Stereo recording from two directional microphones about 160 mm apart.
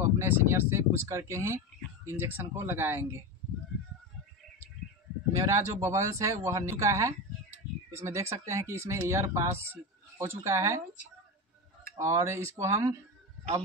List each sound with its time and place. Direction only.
0.0 s speech: 15° right (ahead or behind)
5.5 s speech: 20° right (ahead or behind)
11.9 s speech: 20° right (ahead or behind)